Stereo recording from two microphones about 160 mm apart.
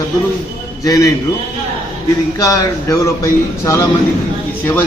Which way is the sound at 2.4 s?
20° left (ahead or behind).